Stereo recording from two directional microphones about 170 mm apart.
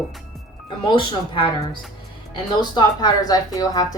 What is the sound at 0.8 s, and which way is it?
Speech, 30° left (ahead or behind).